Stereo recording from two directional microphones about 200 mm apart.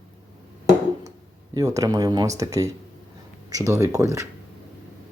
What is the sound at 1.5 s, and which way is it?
Speech, 15° right (ahead or behind).